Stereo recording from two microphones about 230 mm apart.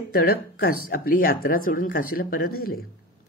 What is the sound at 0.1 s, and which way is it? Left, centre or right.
Speech, left.